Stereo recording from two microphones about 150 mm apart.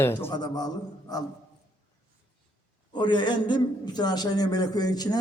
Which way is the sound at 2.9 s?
30° left (ahead or behind).